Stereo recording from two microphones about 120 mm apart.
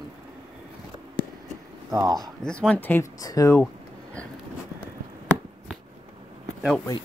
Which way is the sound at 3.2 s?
30° left (ahead or behind).